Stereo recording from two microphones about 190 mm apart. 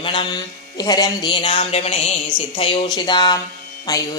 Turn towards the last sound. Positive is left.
turn(degrees=20)  # may be behind; listen again after turning